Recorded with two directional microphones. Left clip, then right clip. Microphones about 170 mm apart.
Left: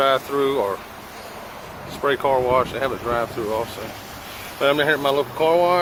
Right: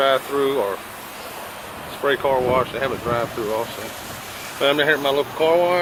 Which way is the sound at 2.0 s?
10° left (ahead or behind).